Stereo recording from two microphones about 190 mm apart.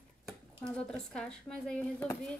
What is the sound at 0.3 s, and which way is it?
Speech, 5° left (ahead or behind).